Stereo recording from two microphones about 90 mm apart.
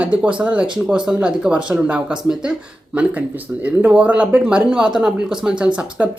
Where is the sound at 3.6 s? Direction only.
15° right (ahead or behind).